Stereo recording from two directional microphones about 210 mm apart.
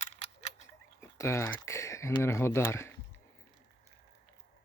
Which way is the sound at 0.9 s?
15° left (ahead or behind).